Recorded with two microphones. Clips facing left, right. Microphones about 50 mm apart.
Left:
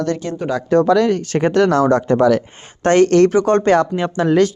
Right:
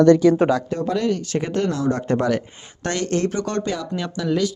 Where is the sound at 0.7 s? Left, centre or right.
Left.